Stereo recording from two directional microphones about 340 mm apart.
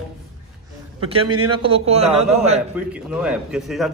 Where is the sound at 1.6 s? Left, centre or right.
Centre.